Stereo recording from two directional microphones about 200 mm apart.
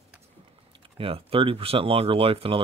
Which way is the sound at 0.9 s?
30° right (ahead or behind).